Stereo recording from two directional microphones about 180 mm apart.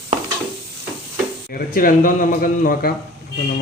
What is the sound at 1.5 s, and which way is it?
Speech, 55° left (ahead or behind).